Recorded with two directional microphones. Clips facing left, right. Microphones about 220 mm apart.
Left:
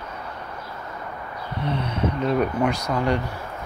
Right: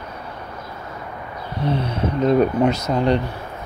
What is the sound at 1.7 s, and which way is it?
Speech, 30° right (ahead or behind).